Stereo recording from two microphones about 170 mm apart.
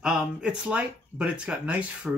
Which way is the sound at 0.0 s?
5° right (ahead or behind).